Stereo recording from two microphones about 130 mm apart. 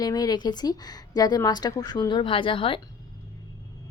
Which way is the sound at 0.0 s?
30° left (ahead or behind).